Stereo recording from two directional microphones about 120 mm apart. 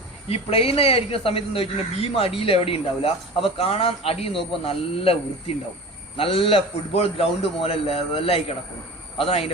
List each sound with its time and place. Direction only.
0.3 s speech: 55° left (ahead or behind)